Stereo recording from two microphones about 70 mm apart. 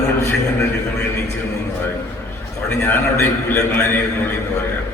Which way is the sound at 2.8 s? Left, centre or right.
Left.